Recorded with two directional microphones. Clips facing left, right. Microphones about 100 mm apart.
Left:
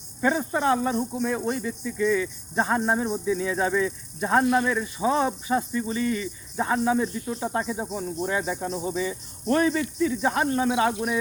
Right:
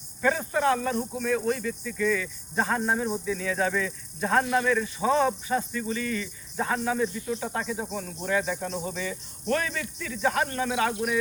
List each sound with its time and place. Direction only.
0.2 s speech: 20° left (ahead or behind)